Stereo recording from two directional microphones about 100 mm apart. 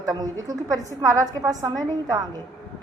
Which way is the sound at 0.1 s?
40° right (ahead or behind).